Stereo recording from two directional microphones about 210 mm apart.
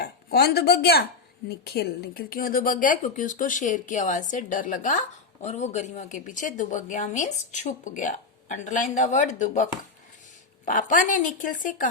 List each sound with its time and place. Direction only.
0.0 s a woman's voice: 50° left (ahead or behind)
10.7 s a woman's voice: 40° left (ahead or behind)